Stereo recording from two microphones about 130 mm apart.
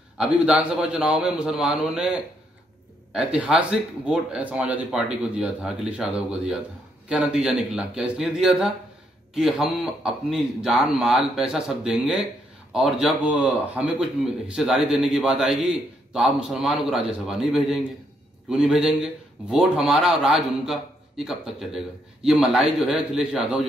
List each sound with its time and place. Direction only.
0.2 s a man's voice: 10° right (ahead or behind)